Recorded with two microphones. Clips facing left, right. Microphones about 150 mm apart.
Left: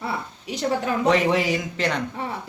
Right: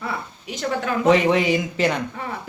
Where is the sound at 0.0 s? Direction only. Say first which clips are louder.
Even; 35° left (ahead or behind).